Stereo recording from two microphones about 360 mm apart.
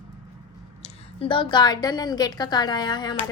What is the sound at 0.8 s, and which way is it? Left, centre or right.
A woman's voice, centre.